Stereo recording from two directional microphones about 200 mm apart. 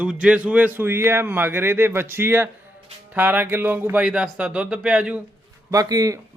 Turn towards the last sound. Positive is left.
turn(degrees=-15)  # may be behind; listen again after turning